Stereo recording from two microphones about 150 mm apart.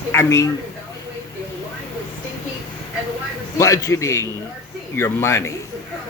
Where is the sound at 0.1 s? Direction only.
20° left (ahead or behind).